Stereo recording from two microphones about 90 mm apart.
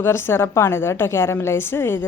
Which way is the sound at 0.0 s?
25° left (ahead or behind).